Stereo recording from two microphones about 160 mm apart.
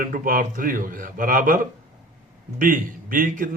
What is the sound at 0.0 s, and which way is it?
Speech, 60° right (ahead or behind).